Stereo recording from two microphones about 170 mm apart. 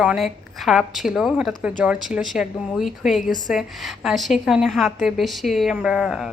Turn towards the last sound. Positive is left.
turn(degrees=0)  # may be behind; listen again after turning